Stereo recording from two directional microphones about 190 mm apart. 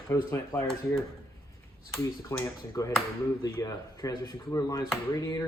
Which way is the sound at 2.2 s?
15° left (ahead or behind).